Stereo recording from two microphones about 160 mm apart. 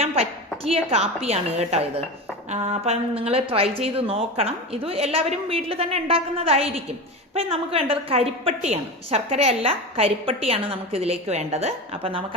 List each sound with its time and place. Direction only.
0.0 s a woman's voice: 40° right (ahead or behind)